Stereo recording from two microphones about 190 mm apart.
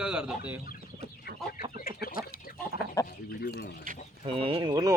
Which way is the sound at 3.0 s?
55° left (ahead or behind).